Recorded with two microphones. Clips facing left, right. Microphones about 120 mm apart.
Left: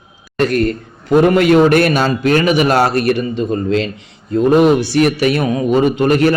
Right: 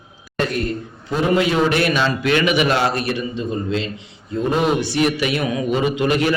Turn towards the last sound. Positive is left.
turn(degrees=45)  # may be behind; listen again after turning